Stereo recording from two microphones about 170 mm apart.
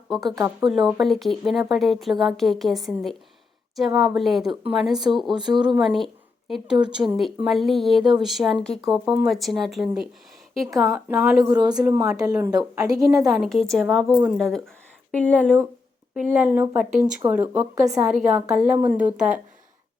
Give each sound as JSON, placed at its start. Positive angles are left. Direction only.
{"t": 0.1, "sound": "speech", "side_deg": 0}
{"t": 0.3, "sound": "a woman's voice", "side_deg": -20}
{"t": 0.7, "sound": "a woman's voice", "side_deg": 0}
{"t": 7.4, "sound": "a woman's voice", "side_deg": 0}
{"t": 11.6, "sound": "a woman's voice", "side_deg": -20}
{"t": 12.5, "sound": "a woman's voice", "side_deg": -20}
{"t": 13.2, "sound": "a woman's voice", "side_deg": 0}
{"t": 16.1, "sound": "a woman's voice", "side_deg": -5}